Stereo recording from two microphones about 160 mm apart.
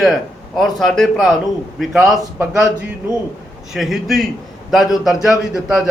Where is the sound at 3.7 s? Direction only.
Centre (ahead or behind).